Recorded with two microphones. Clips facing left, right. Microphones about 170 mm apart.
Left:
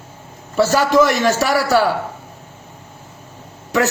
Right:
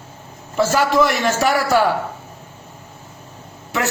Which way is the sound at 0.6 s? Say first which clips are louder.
Left 2 dB; 40° left (ahead or behind).